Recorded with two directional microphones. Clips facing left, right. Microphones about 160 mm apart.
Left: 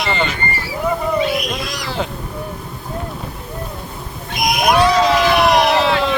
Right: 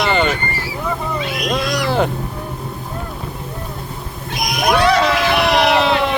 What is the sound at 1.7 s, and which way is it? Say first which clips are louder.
Vehicle: right 7 dB; 60° right (ahead or behind).